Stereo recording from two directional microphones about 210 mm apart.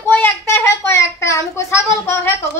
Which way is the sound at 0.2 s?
10° left (ahead or behind).